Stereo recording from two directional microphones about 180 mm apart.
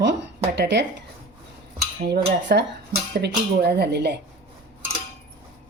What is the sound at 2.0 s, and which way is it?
Speech, 70° right (ahead or behind).